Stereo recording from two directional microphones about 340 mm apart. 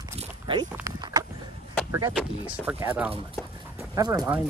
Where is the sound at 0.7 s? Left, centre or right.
Centre.